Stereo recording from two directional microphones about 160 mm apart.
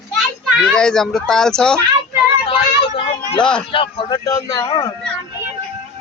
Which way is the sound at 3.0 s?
30° left (ahead or behind).